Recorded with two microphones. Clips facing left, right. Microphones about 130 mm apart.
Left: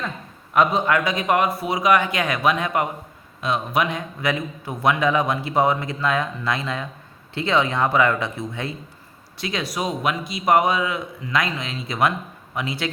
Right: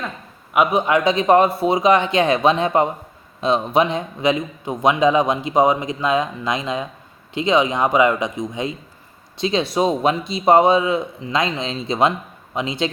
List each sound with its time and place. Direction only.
0.5 s a man's voice: 15° right (ahead or behind)